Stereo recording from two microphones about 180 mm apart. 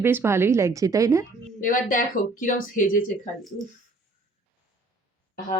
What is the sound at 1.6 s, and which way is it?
Speech, 50° left (ahead or behind).